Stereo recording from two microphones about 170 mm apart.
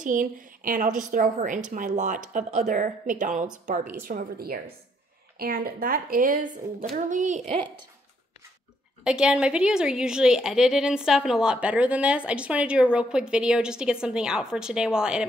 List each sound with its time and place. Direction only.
0.0 s a woman's voice: 50° right (ahead or behind)
9.0 s a woman's voice: 5° right (ahead or behind)